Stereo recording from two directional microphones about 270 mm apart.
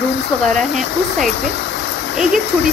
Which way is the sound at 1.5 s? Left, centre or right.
Left.